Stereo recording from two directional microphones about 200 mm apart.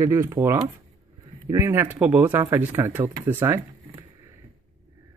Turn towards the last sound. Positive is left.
turn(degrees=-10)  # may be behind; listen again after turning